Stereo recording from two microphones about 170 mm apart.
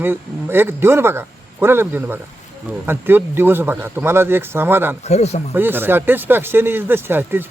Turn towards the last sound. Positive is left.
turn(degrees=-10)  # may be behind; listen again after turning